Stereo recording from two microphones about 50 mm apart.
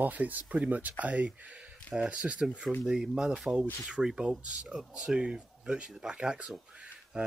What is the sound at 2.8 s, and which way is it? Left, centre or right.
Speech, centre.